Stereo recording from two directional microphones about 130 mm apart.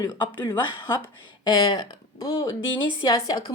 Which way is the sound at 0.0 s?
35° left (ahead or behind).